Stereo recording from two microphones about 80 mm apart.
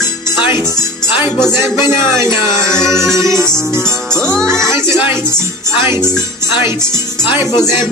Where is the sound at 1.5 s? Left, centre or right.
Right.